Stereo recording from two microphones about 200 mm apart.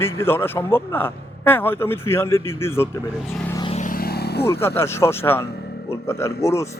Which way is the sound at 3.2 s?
Centre (ahead or behind).